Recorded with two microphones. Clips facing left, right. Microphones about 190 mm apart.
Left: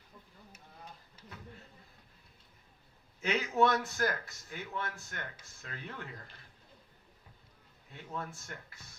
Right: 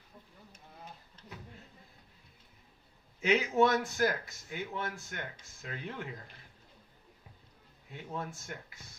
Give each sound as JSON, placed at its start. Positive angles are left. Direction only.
{"t": 3.2, "sound": "a man's voice", "side_deg": -15}
{"t": 8.1, "sound": "a man's voice", "side_deg": -15}